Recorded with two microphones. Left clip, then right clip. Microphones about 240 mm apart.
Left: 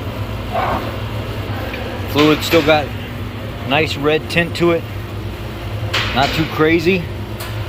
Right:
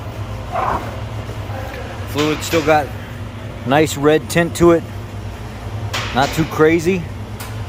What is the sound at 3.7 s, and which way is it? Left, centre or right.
Speech, right.